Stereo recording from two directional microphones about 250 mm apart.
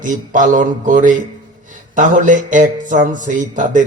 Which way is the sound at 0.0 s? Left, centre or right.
Right.